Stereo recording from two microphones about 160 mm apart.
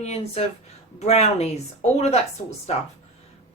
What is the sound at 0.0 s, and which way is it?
Speech, 40° left (ahead or behind).